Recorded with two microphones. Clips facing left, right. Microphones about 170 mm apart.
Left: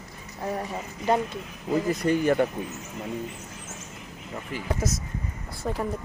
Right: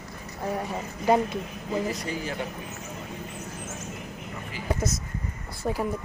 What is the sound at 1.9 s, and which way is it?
Speech, 55° left (ahead or behind).